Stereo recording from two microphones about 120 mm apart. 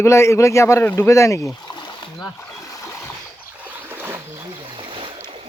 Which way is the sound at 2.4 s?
25° left (ahead or behind).